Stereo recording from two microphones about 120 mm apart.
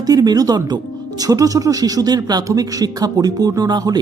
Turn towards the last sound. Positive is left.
turn(degrees=-35)  # may be behind; listen again after turning